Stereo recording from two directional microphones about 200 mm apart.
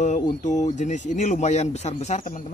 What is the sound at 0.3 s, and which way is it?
Speech, 35° left (ahead or behind).